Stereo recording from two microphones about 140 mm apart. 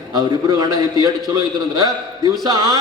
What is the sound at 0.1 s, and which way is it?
A man's voice, 30° right (ahead or behind).